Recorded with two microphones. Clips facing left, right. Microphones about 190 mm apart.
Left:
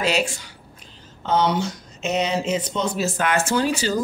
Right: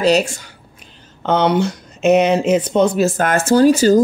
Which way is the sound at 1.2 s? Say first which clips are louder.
Right 5 dB; 60° right (ahead or behind).